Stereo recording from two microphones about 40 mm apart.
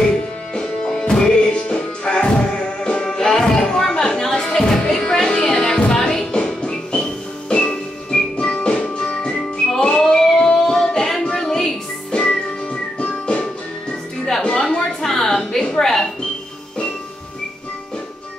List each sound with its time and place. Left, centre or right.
0.6 s music: centre
9.8 s child singing: centre
12.1 s music: left
14.4 s a sound: left